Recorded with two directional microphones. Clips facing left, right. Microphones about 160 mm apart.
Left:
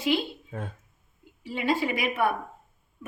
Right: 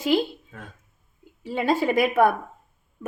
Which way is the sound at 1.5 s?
45° right (ahead or behind).